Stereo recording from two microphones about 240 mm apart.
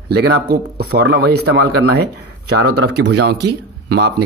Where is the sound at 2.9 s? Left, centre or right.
Right.